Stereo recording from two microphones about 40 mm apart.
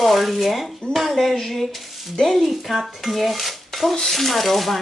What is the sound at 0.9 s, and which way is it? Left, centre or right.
Dishes, centre.